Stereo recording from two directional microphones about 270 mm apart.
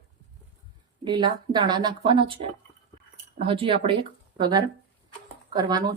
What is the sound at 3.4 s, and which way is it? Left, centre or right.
Speech, centre.